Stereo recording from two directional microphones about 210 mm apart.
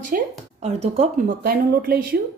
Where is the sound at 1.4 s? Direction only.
45° right (ahead or behind).